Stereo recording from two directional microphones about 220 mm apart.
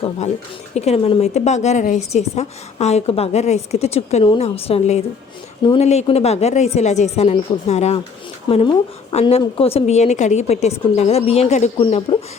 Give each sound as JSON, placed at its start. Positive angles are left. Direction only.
{"t": 0.7, "sound": "a woman's voice", "side_deg": 30}